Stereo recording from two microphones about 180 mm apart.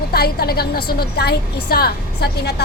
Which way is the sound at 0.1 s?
60° left (ahead or behind).